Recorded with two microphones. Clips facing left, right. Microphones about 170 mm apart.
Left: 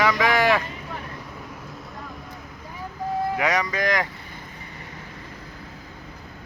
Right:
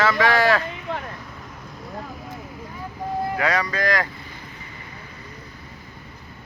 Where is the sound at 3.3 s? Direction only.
20° left (ahead or behind).